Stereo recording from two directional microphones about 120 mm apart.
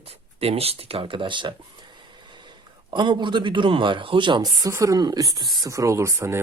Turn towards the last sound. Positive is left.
turn(degrees=-25)  # may be behind; listen again after turning